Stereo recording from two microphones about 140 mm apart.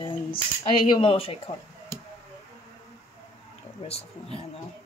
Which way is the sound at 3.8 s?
45° left (ahead or behind).